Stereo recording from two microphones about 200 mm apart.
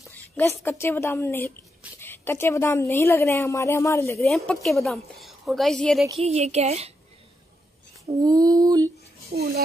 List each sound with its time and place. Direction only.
0.4 s a woman's voice: 15° left (ahead or behind)
4.2 s a woman's voice: centre (ahead or behind)
6.1 s speech: 30° right (ahead or behind)
8.2 s a sound: 20° right (ahead or behind)